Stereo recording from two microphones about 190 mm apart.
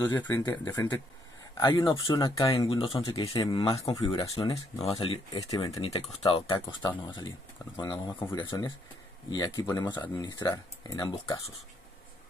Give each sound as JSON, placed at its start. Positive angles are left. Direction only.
{"t": 0.2, "sound": "speech", "side_deg": 15}
{"t": 2.7, "sound": "speech", "side_deg": 25}
{"t": 10.2, "sound": "speech", "side_deg": 20}